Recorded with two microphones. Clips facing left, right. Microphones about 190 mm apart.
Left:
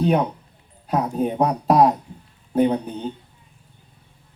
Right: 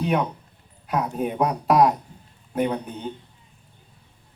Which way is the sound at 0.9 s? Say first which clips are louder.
Left 3 dB; 30° left (ahead or behind).